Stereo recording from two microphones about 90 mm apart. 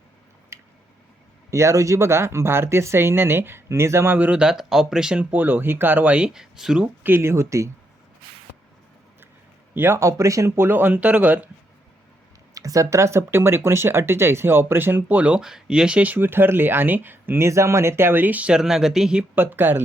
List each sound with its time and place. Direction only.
0.5 s a sound: 30° right (ahead or behind)
1.5 s speech: 35° right (ahead or behind); by 6.9 s 10° right (ahead or behind)
7.0 s speech: 25° right (ahead or behind)
9.7 s speech: 25° right (ahead or behind)
12.5 s speech: 40° right (ahead or behind); by 19.2 s 5° right (ahead or behind)
19.4 s speech: 20° right (ahead or behind)